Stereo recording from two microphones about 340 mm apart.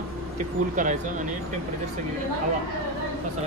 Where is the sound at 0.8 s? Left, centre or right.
Right.